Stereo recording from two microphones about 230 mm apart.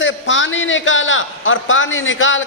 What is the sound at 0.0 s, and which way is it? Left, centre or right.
A man's voice, left.